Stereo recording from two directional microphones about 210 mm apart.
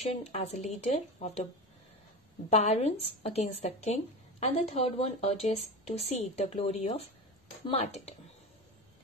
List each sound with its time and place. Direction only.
0.0 s a woman's voice: 30° left (ahead or behind)
2.5 s a woman's voice: 30° left (ahead or behind)